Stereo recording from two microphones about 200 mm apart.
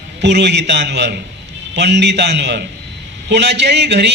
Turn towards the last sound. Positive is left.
turn(degrees=-60)  # may be behind; listen again after turning